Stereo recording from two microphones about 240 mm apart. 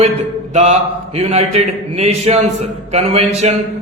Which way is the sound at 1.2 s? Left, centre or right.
Right.